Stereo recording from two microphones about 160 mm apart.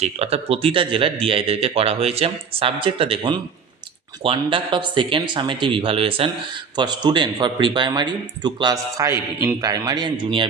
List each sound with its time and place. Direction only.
0.0 s a man's voice: 40° right (ahead or behind)